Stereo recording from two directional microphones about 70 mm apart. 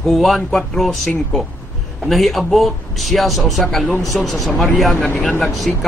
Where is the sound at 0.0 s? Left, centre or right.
Centre.